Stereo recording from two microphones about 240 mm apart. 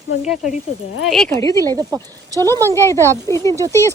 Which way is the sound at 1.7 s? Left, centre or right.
Centre.